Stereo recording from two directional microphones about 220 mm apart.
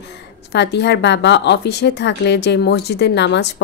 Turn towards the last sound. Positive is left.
turn(degrees=50)  # may be behind; listen again after turning